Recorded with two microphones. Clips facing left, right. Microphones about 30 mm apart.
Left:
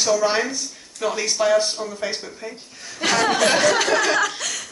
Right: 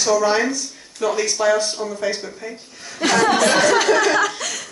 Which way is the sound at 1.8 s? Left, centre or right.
Centre.